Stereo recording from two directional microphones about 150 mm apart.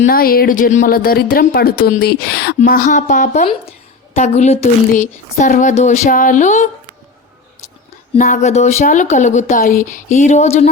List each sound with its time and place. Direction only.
0.0 s speech: 75° left (ahead or behind)
2.6 s speech: 65° left (ahead or behind)
3.4 s a woman's voice: 40° left (ahead or behind)
8.2 s a woman's voice: 55° left (ahead or behind)